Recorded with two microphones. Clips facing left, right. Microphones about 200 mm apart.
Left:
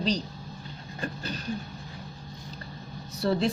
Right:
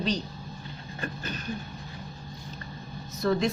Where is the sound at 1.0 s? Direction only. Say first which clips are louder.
Left 1 dB; 35° left (ahead or behind).